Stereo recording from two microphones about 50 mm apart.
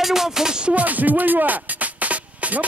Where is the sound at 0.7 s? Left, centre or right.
Right.